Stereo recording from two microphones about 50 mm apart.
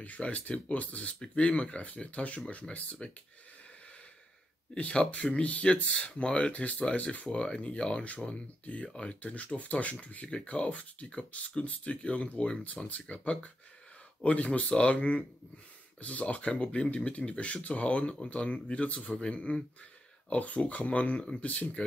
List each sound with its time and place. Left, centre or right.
0.0 s speech: left
4.7 s speech: left